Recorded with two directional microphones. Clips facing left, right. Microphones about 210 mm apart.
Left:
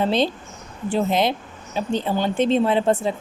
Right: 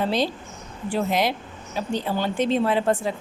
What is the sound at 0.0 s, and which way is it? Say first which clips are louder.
Speech: left 3 dB; 25° left (ahead or behind).